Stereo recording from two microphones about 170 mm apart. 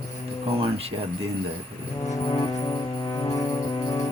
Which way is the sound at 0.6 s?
35° right (ahead or behind).